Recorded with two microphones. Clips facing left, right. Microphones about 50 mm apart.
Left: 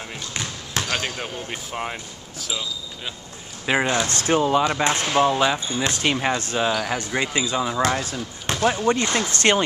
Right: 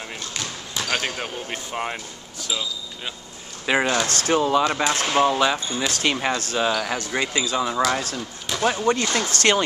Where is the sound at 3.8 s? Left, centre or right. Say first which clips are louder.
Even; left.